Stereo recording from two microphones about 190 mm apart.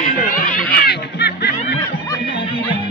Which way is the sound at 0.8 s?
60° left (ahead or behind).